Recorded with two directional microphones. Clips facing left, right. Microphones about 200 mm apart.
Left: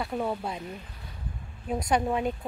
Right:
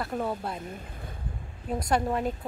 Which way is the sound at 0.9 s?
50° right (ahead or behind).